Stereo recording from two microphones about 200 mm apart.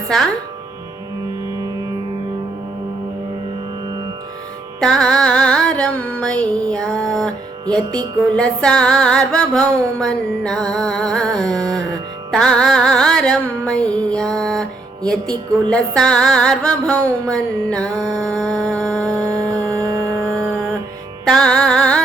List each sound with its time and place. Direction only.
0.1 s music: centre (ahead or behind)
4.8 s music: centre (ahead or behind)
11.6 s music: 20° right (ahead or behind)
12.3 s music: 5° left (ahead or behind)
17.9 s music: 20° right (ahead or behind)
18.3 s music: 5° left (ahead or behind)
19.3 s music: 20° right (ahead or behind)
21.2 s music: 5° left (ahead or behind)